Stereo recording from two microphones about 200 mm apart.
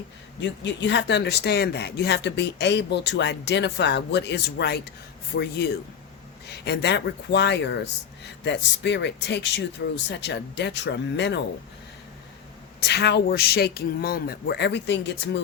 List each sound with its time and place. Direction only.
0.3 s speech: 60° left (ahead or behind)
12.8 s speech: 55° left (ahead or behind)